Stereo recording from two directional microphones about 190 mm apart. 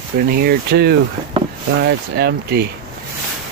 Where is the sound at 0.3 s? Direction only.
55° right (ahead or behind).